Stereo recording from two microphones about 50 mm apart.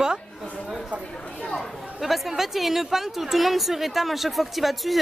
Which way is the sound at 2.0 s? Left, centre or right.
Centre.